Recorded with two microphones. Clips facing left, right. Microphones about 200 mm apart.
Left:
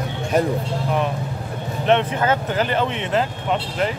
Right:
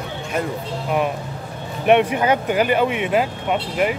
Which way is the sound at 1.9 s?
15° right (ahead or behind).